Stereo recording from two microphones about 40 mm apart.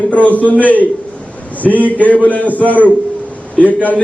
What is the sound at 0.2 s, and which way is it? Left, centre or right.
A man's voice, left.